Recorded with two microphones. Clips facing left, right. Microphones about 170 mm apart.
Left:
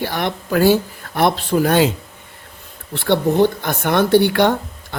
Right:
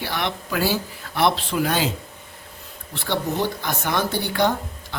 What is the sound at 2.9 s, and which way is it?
Speech, 60° left (ahead or behind).